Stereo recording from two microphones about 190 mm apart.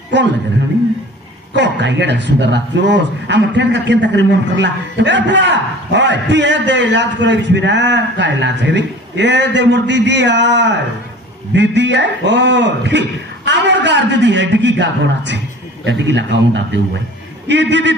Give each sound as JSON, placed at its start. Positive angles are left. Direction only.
{"t": 1.5, "sound": "a man's voice", "side_deg": -65}
{"t": 17.5, "sound": "a man's voice", "side_deg": -65}